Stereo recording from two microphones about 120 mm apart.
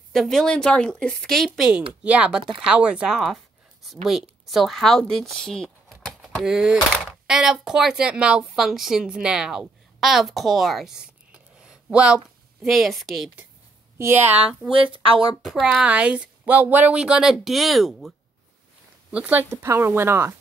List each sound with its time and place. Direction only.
0.1 s a woman's voice: centre (ahead or behind)
13.9 s a woman's voice: 20° right (ahead or behind)
14.7 s a woman's voice: 50° right (ahead or behind)
15.4 s speech: 5° right (ahead or behind)
19.0 s speech: 10° right (ahead or behind)